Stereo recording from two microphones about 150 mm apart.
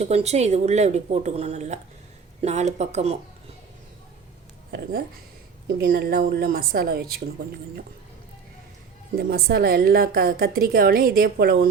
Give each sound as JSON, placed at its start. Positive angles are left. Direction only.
{"t": 0.0, "sound": "speech", "side_deg": -45}
{"t": 4.7, "sound": "a woman's voice", "side_deg": -90}
{"t": 9.1, "sound": "a woman's voice", "side_deg": -90}